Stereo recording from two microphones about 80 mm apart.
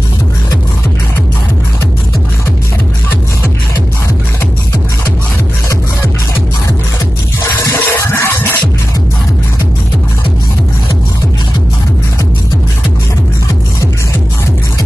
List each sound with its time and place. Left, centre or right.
7.6 s music: left